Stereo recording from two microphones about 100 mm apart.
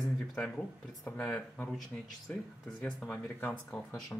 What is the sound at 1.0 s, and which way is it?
Speech, 10° left (ahead or behind).